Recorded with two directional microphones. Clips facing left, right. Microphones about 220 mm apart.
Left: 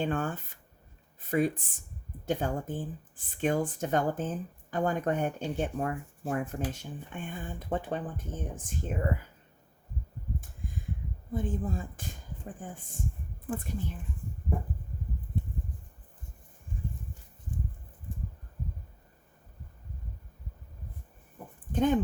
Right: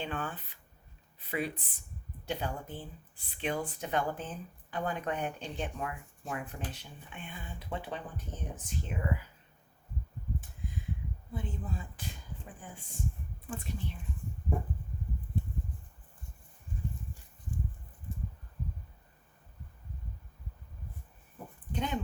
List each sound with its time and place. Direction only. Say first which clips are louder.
0.0 s speech: left 7 dB; 45° left (ahead or behind)
11.3 s speech: left 8 dB; 45° left (ahead or behind)
21.7 s speech: left 10 dB; 45° left (ahead or behind)